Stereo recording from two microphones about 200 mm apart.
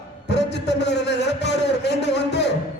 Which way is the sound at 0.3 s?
60° left (ahead or behind).